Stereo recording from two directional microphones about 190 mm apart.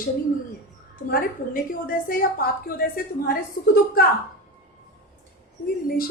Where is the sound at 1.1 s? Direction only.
50° left (ahead or behind).